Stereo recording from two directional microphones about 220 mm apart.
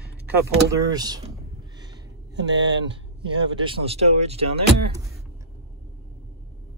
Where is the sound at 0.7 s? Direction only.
20° right (ahead or behind).